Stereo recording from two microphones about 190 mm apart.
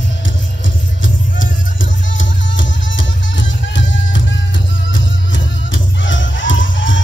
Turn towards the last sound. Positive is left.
turn(degrees=80)